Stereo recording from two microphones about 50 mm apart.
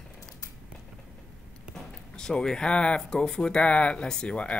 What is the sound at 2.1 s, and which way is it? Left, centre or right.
Speech, centre.